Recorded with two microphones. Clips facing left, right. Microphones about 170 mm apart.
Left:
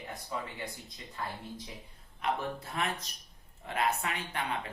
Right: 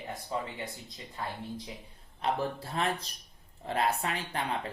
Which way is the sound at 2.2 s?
30° right (ahead or behind).